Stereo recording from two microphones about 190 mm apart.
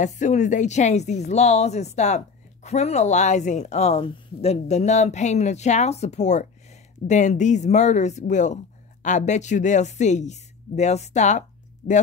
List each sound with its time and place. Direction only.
0.0 s a woman's voice: 40° left (ahead or behind)